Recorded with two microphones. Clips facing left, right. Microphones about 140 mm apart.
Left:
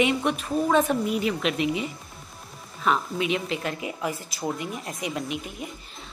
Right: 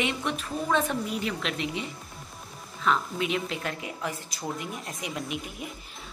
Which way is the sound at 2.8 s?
5° left (ahead or behind).